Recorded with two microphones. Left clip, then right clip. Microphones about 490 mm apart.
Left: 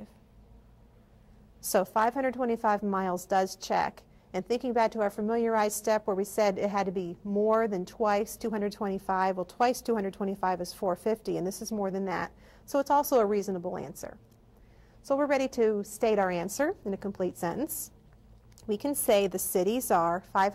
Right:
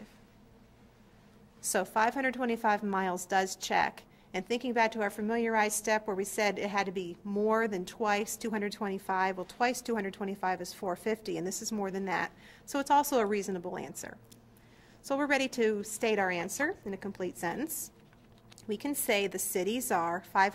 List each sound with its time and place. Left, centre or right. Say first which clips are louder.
1.6 s a woman's voice: left 3 dB; left